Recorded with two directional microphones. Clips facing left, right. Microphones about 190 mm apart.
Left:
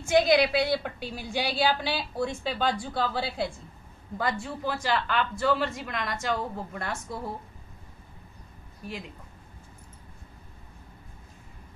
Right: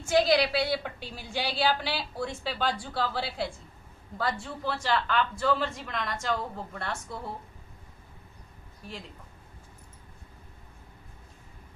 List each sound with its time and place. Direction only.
0.4 s a woman's voice: 50° left (ahead or behind)
0.7 s speech: 15° left (ahead or behind)